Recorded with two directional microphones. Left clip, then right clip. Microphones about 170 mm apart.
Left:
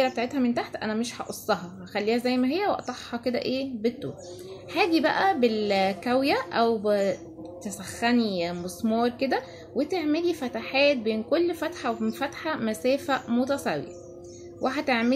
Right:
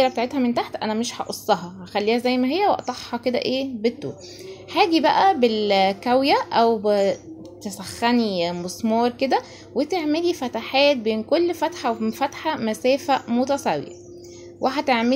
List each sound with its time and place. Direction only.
0.0 s speech: 15° right (ahead or behind)